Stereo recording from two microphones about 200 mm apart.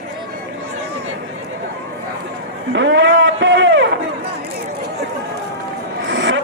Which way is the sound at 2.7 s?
65° right (ahead or behind).